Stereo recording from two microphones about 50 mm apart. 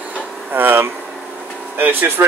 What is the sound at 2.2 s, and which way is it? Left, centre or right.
Speech, right.